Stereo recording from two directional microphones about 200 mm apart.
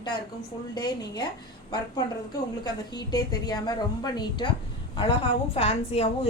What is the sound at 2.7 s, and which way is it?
A woman's voice, 20° left (ahead or behind).